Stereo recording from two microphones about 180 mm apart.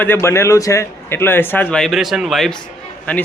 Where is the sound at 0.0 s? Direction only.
15° left (ahead or behind).